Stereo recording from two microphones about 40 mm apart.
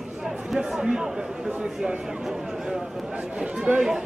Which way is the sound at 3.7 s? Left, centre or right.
Right.